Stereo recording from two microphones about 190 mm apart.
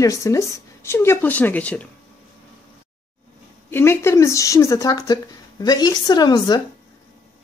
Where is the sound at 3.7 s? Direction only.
10° left (ahead or behind).